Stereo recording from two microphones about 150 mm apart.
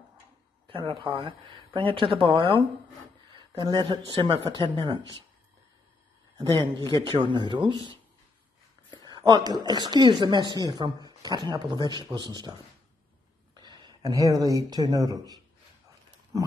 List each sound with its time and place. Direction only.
0.7 s speech: 35° right (ahead or behind)
6.3 s speech: 30° right (ahead or behind)
13.6 s speech: 30° right (ahead or behind)